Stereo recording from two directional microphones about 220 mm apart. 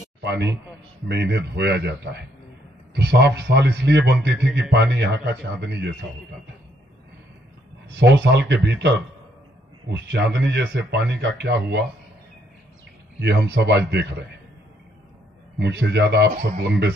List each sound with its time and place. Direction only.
0.2 s a man's voice: 50° right (ahead or behind)
7.9 s speech: 50° right (ahead or behind)
13.2 s speech: 50° right (ahead or behind)
15.6 s speech: 50° right (ahead or behind)